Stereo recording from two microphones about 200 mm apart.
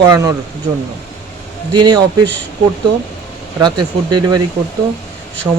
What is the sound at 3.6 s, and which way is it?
Speech, 20° right (ahead or behind).